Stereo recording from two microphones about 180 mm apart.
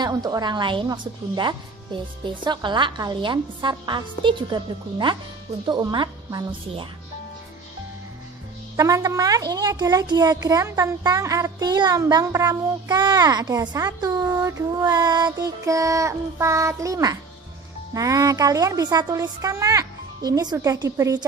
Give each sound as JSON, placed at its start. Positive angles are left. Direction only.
{"t": 0.0, "sound": "a child's voice", "side_deg": -20}
{"t": 8.7, "sound": "a child's voice", "side_deg": -20}